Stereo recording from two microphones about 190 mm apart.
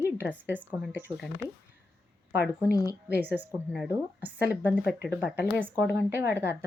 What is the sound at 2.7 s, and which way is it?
Speech, 20° left (ahead or behind).